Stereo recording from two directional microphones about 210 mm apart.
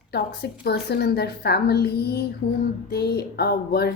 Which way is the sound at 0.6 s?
50° left (ahead or behind).